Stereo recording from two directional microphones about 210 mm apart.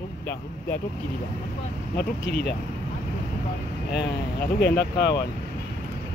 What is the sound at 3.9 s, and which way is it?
Speech, 50° left (ahead or behind).